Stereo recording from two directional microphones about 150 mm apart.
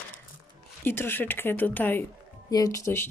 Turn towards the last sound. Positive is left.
turn(degrees=20)  # may be behind; listen again after turning